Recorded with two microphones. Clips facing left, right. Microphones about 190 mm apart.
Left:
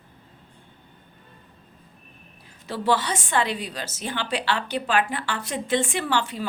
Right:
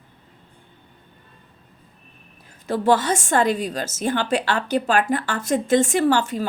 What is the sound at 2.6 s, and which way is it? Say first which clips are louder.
A woman's voice: right 5 dB; 50° right (ahead or behind).